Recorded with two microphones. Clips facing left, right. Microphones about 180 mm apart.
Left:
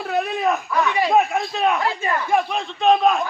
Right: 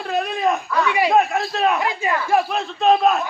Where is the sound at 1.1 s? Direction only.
Centre (ahead or behind).